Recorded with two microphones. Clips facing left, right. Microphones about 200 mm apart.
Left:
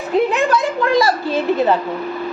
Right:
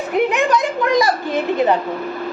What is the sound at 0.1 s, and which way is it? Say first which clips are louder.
A woman's voice: left 1 dB; 15° right (ahead or behind).